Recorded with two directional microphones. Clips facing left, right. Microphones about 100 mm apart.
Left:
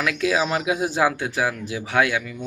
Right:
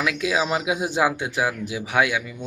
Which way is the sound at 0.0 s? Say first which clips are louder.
Left 1 dB; 15° right (ahead or behind).